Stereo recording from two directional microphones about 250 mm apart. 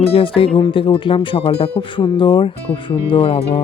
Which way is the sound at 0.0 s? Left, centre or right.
Left.